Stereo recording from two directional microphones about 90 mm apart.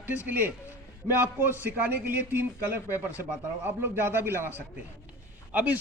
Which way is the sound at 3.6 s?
25° right (ahead or behind).